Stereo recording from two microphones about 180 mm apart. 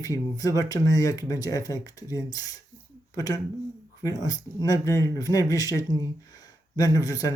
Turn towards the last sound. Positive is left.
turn(degrees=20)  # may be behind; listen again after turning